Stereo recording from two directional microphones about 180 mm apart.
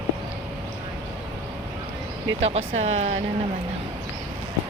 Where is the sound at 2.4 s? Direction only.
40° right (ahead or behind).